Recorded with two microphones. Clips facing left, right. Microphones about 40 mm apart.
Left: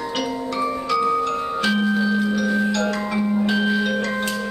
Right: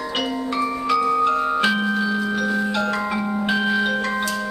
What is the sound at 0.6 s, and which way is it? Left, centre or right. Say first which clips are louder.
Music: right 1 dB; centre.